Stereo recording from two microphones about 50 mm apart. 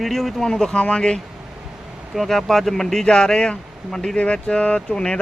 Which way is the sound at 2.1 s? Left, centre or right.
Centre.